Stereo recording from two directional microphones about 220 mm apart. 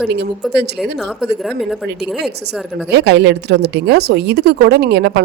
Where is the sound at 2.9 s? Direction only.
50° right (ahead or behind).